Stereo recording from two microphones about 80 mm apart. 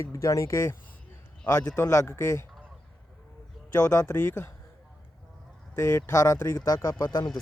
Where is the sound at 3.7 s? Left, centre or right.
Left.